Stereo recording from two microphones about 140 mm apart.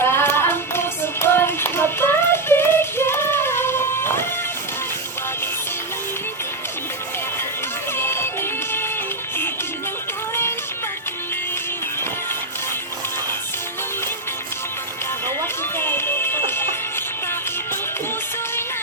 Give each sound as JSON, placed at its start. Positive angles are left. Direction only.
{"t": 0.0, "sound": "a sound", "side_deg": 15}
{"t": 7.9, "sound": "music", "side_deg": 15}
{"t": 15.8, "sound": "music", "side_deg": 15}